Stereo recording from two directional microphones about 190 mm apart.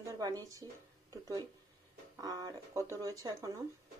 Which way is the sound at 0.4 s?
15° right (ahead or behind).